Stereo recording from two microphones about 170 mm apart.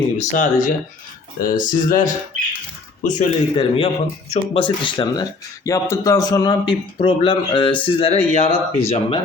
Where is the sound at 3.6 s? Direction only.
35° left (ahead or behind).